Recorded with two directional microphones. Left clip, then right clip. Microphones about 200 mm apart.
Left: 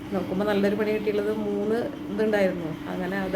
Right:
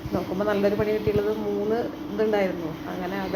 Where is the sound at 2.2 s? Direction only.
15° left (ahead or behind).